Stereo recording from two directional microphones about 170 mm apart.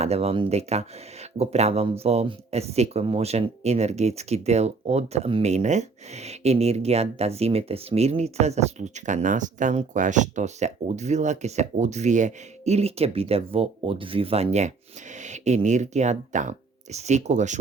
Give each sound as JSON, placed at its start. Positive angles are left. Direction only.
{"t": 0.0, "sound": "speech", "side_deg": -35}